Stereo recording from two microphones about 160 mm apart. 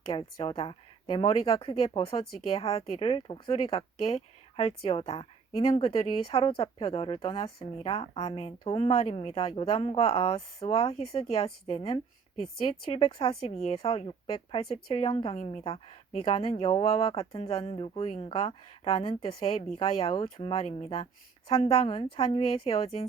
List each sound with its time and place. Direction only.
0.1 s speech: 35° left (ahead or behind)